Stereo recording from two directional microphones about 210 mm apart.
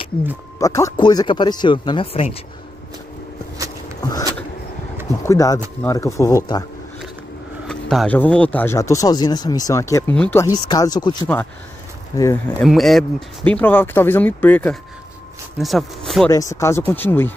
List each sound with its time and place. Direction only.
0.6 s speech: 15° left (ahead or behind)
5.2 s speech: 15° left (ahead or behind)
7.6 s speech: centre (ahead or behind)
12.6 s speech: centre (ahead or behind)
16.3 s speech: 15° left (ahead or behind)